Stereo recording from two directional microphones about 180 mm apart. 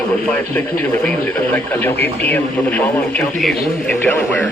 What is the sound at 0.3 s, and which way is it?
Speech, 10° left (ahead or behind).